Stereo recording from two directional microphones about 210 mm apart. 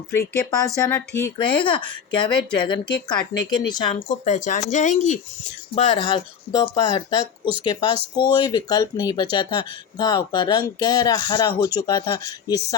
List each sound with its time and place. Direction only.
0.1 s speech: 15° left (ahead or behind)
1.4 s speech: 25° left (ahead or behind)
4.1 s speech: 35° left (ahead or behind)
5.7 s speech: 25° left (ahead or behind)